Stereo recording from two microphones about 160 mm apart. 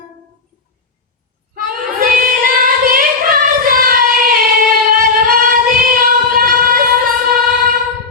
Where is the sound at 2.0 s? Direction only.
65° right (ahead or behind).